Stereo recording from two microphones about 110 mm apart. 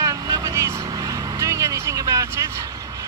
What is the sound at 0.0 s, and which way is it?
Vehicle, 30° right (ahead or behind).